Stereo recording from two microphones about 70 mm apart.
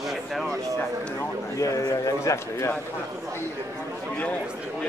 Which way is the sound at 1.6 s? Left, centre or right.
Left.